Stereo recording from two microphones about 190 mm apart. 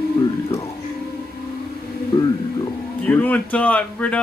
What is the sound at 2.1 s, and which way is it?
Speech, 20° left (ahead or behind).